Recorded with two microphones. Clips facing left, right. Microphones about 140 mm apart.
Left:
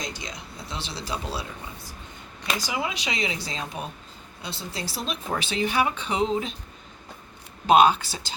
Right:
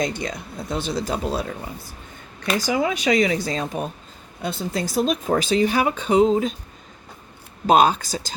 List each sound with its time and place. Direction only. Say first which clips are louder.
0.0 s speech: right 10 dB; 55° right (ahead or behind)
2.6 s speech: right 12 dB; 45° right (ahead or behind)
7.7 s speech: right 1 dB; 40° right (ahead or behind)